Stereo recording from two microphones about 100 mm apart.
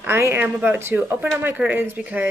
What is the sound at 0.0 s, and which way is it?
Speech, 20° right (ahead or behind).